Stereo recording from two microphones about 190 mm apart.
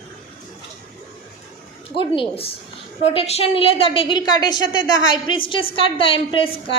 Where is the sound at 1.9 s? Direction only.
25° left (ahead or behind).